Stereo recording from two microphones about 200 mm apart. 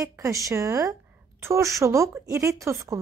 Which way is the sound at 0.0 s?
15° right (ahead or behind).